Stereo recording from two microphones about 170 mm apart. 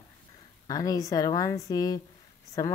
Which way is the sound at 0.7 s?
20° left (ahead or behind).